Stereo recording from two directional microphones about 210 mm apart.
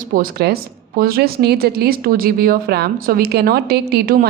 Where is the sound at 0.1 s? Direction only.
45° right (ahead or behind).